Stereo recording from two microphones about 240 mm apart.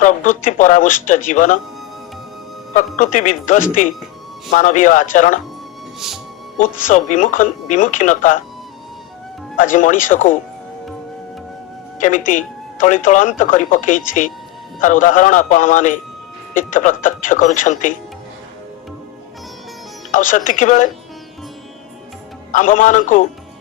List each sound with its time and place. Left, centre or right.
0.0 s speech: left
2.7 s speech: left
6.6 s speech: left
9.6 s speech: left
11.9 s speech: left
20.1 s speech: left
22.5 s speech: left